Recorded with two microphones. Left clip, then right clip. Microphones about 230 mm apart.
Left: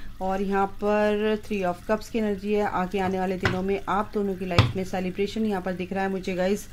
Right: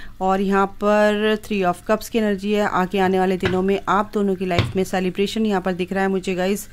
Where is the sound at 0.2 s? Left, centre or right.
Right.